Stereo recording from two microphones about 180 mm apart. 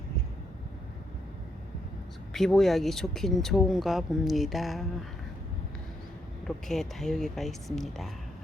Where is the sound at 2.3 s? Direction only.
Centre (ahead or behind).